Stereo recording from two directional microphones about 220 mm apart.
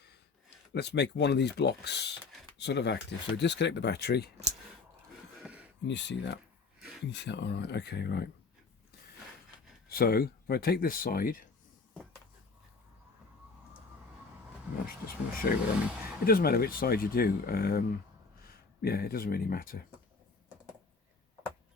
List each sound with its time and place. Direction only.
0.7 s speech: 50° left (ahead or behind)
5.4 s a sound: 5° right (ahead or behind)
5.9 s speech: 55° left (ahead or behind)
9.9 s speech: 45° left (ahead or behind)
14.8 s speech: 40° left (ahead or behind)